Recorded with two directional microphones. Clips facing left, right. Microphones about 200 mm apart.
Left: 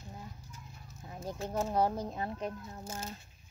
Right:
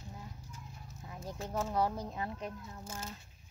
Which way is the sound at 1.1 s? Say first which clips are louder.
Left 3 dB; 25° left (ahead or behind).